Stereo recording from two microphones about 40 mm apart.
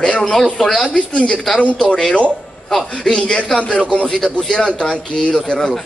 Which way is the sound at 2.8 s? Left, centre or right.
Left.